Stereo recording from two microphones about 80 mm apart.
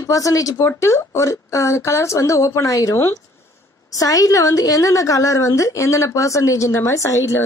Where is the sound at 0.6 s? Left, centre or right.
Left.